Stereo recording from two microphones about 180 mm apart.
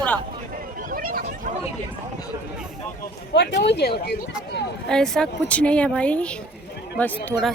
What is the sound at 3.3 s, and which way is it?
Speech, 65° left (ahead or behind).